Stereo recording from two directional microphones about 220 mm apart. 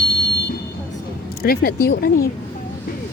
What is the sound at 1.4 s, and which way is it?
Speech, 45° left (ahead or behind).